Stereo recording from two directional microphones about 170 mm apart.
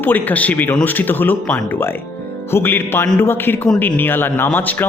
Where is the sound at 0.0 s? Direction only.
10° left (ahead or behind).